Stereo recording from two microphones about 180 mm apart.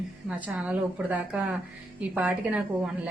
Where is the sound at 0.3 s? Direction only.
10° right (ahead or behind).